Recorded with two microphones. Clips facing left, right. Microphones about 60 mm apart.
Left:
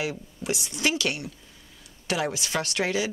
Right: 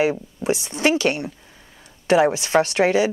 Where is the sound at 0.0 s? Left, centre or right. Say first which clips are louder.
Right 10 dB; right.